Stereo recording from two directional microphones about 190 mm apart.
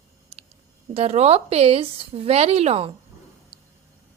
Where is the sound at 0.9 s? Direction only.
35° right (ahead or behind).